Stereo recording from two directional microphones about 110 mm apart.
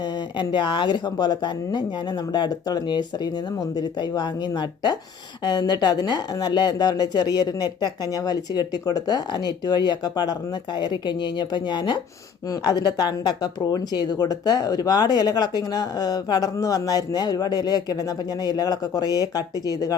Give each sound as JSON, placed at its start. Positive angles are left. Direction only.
{"t": 0.3, "sound": "speech", "side_deg": 45}